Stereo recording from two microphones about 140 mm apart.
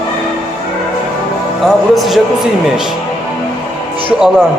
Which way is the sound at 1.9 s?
Centre (ahead or behind).